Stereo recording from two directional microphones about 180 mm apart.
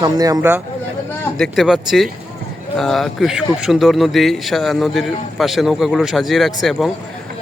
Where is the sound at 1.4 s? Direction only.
Centre (ahead or behind).